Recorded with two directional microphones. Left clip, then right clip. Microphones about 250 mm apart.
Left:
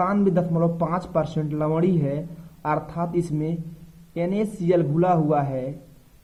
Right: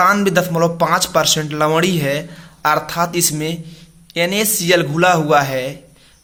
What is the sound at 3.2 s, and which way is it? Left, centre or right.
A man's voice, centre.